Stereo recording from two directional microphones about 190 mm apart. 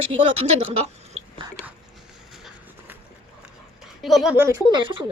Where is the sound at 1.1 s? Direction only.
25° right (ahead or behind).